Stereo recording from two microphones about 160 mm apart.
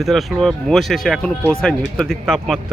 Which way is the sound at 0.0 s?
Centre (ahead or behind).